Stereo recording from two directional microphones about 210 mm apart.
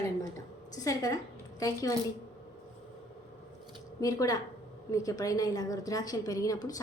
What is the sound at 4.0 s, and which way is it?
A woman's voice, 15° left (ahead or behind).